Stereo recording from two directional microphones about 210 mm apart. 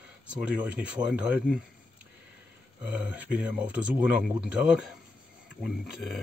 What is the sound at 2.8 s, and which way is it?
Speech, 5° right (ahead or behind).